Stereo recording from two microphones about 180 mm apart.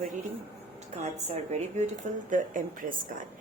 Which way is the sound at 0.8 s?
40° right (ahead or behind).